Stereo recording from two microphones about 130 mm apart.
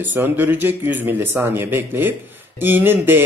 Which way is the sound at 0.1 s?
15° right (ahead or behind).